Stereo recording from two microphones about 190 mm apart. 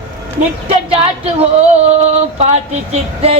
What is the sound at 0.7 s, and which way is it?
Female singing, 30° right (ahead or behind).